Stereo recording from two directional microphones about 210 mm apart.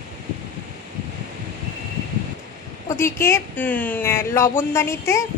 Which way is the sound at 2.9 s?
10° left (ahead or behind).